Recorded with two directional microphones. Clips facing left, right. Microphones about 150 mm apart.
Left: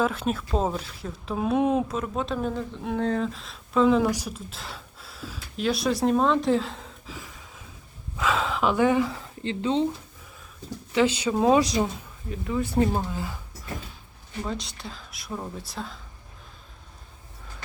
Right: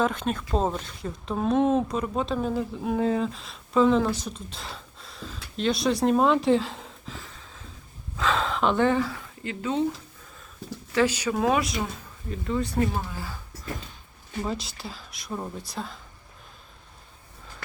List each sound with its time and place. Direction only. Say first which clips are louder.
0.0 s speech: even; 5° left (ahead or behind)
7.2 s a sound: left 2 dB; 10° left (ahead or behind)
8.2 s speech: even; 5° left (ahead or behind); by 9.8 s 25° left (ahead or behind)
10.9 s speech: left 1 dB; 20° left (ahead or behind)
12.3 s speech: even; 5° left (ahead or behind)
12.7 s speech: left 3 dB; 20° left (ahead or behind)
14.4 s speech: right 1 dB; 5° right (ahead or behind)